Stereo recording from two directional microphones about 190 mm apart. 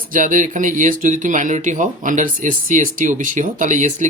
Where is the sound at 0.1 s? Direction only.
45° right (ahead or behind).